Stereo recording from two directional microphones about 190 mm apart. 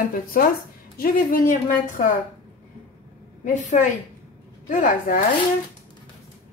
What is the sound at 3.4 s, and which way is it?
A woman's voice, 40° left (ahead or behind).